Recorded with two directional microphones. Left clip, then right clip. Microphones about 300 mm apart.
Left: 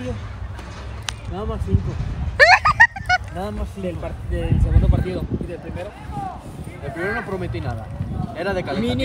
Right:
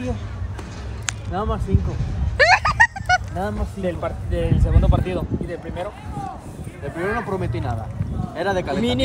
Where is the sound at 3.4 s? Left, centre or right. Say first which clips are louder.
Right 3 dB; centre.